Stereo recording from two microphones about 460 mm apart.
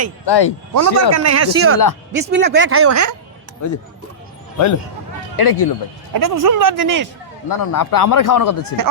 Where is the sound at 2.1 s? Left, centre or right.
Right.